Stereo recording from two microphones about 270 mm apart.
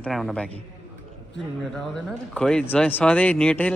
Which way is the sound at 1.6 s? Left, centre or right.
Centre.